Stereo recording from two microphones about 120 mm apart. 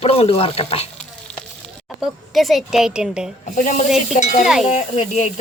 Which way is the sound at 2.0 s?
Centre (ahead or behind).